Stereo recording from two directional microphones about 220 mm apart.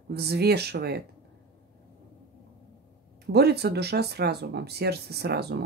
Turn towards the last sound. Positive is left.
turn(degrees=-45)  # may be behind; listen again after turning